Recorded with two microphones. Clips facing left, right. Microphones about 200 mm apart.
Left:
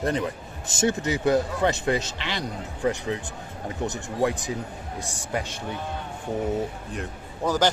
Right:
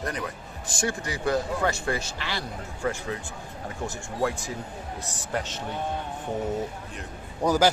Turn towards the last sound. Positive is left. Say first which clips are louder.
# right 1 dB
turn(degrees=-10)  # may be behind; listen again after turning